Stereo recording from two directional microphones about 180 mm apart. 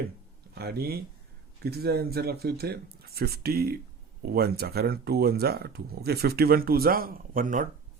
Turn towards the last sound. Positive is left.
turn(degrees=-50)  # may be behind; listen again after turning